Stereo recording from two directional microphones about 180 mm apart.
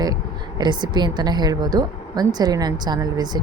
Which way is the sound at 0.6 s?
25° right (ahead or behind).